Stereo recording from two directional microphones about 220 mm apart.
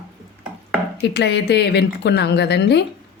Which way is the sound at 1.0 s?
50° left (ahead or behind).